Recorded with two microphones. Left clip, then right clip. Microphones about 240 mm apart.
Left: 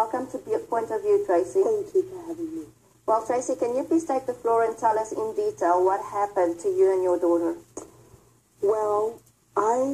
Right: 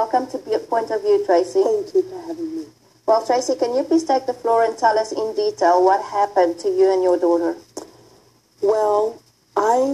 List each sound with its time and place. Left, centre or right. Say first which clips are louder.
0.0 s speech: right 7 dB; right
3.1 s speech: right 6 dB; right
8.6 s speech: right 6 dB; right